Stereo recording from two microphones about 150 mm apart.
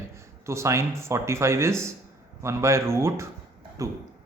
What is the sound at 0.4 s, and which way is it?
A man's voice, 20° right (ahead or behind).